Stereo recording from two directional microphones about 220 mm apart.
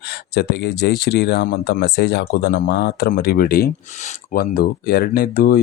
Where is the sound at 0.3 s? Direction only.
50° left (ahead or behind).